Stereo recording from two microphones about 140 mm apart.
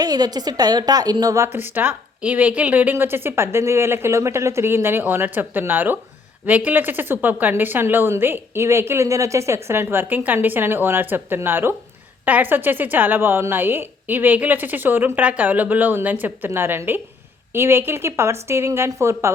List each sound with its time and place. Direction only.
0.0 s a woman's voice: 30° right (ahead or behind)